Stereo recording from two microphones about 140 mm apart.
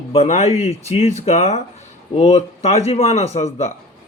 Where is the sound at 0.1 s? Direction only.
55° left (ahead or behind).